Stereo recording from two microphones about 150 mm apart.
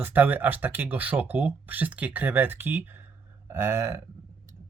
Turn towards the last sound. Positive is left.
turn(degrees=-20)  # may be behind; listen again after turning